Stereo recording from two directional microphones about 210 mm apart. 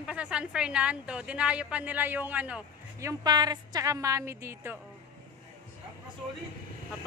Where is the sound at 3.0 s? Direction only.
20° right (ahead or behind).